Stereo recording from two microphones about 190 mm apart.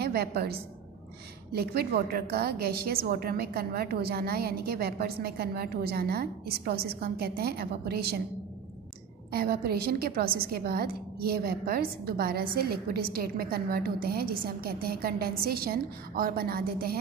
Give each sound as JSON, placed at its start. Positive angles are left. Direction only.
{"t": 0.0, "sound": "a woman's voice", "side_deg": -55}
{"t": 9.3, "sound": "a woman's voice", "side_deg": -55}